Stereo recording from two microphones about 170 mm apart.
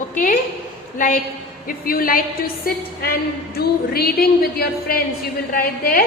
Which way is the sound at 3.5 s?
65° left (ahead or behind).